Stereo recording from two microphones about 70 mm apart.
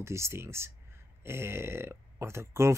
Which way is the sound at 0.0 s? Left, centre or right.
Right.